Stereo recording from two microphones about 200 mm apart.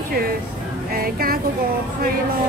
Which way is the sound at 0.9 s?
50° right (ahead or behind).